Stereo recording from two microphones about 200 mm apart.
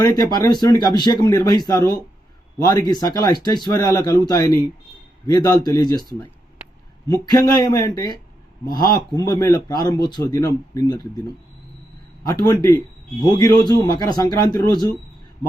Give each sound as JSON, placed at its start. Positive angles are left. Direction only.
{"t": 0.0, "sound": "speech", "side_deg": 20}
{"t": 7.1, "sound": "speech", "side_deg": 20}
{"t": 12.2, "sound": "speech", "side_deg": 20}